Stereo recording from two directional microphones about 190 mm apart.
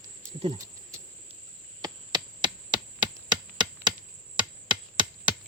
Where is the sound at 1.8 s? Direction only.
25° right (ahead or behind).